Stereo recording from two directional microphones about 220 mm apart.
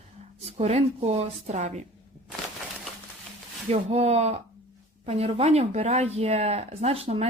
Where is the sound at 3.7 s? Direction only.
30° right (ahead or behind).